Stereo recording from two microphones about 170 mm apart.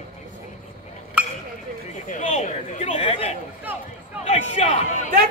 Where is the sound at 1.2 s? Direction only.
5° right (ahead or behind).